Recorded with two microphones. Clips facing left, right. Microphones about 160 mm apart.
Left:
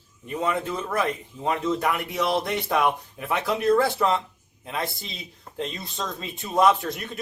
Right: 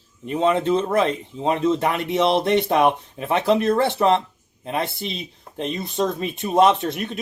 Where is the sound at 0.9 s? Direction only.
25° right (ahead or behind).